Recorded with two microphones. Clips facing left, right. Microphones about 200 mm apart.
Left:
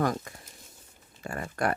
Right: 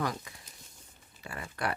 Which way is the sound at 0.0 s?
50° left (ahead or behind).